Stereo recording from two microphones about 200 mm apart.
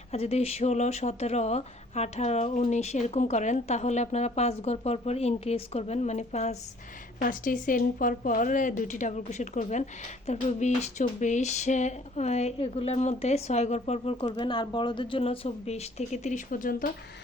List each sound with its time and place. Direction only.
0.1 s speech: 30° left (ahead or behind)